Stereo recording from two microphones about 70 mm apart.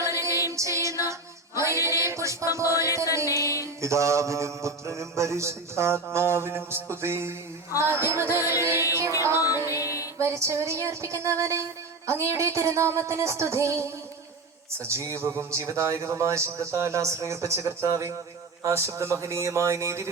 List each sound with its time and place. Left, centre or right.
0.0 s music: right
3.2 s music: left
3.8 s mantra: right
9.6 s music: left
10.2 s a man's voice: right